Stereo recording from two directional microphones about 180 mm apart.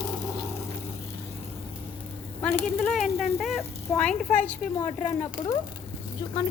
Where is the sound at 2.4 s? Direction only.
10° left (ahead or behind).